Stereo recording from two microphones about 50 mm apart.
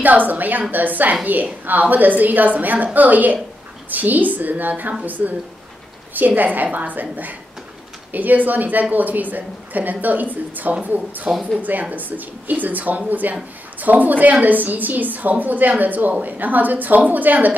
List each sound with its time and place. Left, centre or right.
0.0 s a woman's voice: right
11.2 s speech: centre
11.6 s a woman's voice: right